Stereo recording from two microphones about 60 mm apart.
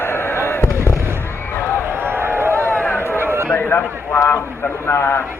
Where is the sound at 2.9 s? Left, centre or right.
Left.